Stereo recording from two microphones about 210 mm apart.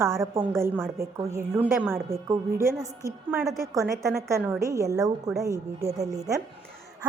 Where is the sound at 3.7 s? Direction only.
15° right (ahead or behind).